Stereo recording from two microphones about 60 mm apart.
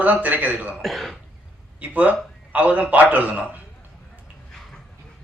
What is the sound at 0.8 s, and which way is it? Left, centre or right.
Speech, centre.